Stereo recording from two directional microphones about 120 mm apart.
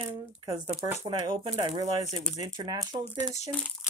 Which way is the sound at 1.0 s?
40° right (ahead or behind).